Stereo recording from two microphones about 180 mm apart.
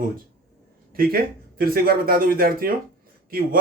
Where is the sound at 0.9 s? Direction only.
55° right (ahead or behind).